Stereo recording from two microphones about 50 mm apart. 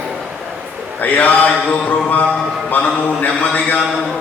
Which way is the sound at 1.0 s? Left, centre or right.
Left.